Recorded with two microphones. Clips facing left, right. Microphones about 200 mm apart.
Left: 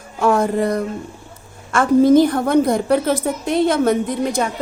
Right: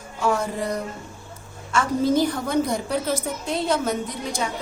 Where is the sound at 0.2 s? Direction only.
55° left (ahead or behind).